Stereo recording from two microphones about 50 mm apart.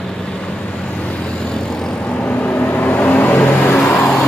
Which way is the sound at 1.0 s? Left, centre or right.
Left.